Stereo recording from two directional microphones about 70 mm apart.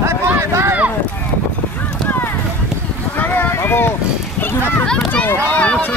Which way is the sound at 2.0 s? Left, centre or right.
Left.